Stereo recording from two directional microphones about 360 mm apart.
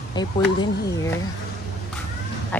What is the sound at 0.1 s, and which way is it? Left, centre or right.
Speech, centre.